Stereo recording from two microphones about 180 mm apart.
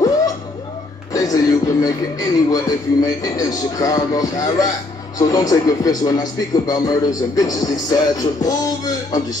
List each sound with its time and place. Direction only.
1.1 s speech: 20° left (ahead or behind)